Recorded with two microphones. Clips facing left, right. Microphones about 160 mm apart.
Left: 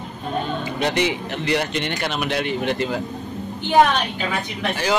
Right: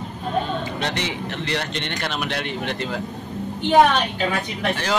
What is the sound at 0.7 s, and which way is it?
Speech, 10° left (ahead or behind).